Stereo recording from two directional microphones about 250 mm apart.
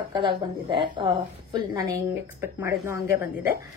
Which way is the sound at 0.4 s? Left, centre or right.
Centre.